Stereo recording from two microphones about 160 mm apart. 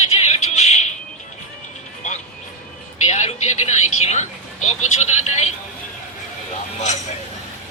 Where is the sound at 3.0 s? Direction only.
45° left (ahead or behind).